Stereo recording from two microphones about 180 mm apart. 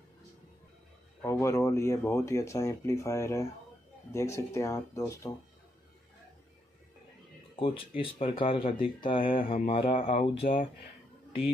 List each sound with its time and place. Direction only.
1.2 s speech: 15° left (ahead or behind)
7.5 s speech: 30° left (ahead or behind)